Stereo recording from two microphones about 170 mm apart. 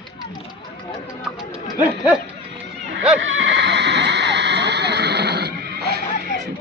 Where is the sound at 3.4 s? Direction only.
90° right; by 6.0 s 70° right (ahead or behind).